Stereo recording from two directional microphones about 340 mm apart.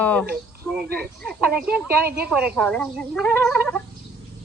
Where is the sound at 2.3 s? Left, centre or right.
Centre.